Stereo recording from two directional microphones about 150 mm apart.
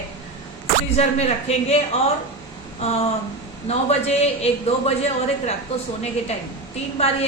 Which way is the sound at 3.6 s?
45° left (ahead or behind).